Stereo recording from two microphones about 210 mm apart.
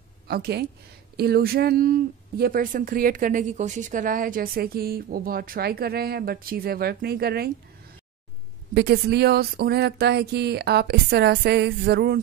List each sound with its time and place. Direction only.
0.3 s speech: 50° right (ahead or behind)
8.7 s speech: 50° right (ahead or behind)